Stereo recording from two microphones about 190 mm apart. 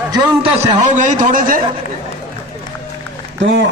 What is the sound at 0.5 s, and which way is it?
A man's voice, 40° right (ahead or behind).